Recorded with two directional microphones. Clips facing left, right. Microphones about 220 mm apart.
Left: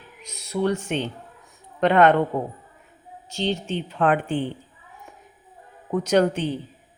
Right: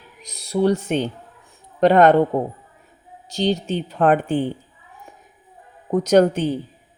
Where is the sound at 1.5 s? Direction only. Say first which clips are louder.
Right 5 dB; 35° right (ahead or behind).